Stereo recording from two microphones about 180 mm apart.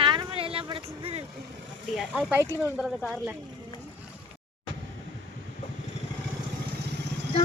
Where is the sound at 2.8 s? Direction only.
Centre (ahead or behind).